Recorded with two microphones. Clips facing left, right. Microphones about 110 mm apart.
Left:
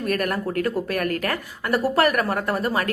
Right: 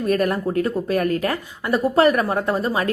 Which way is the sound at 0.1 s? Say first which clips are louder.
Right 5 dB; 25° right (ahead or behind).